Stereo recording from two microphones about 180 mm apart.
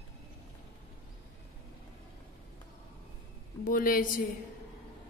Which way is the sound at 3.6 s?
50° left (ahead or behind).